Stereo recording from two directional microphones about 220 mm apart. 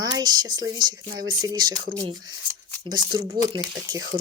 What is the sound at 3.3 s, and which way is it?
Speech, 20° right (ahead or behind).